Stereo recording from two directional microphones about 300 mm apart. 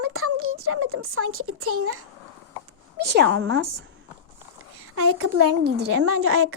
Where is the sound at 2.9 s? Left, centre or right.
Right.